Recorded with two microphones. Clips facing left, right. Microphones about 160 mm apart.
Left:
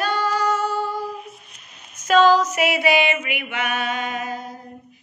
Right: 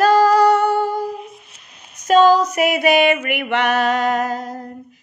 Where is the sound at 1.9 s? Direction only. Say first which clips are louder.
Right 3 dB; 40° right (ahead or behind).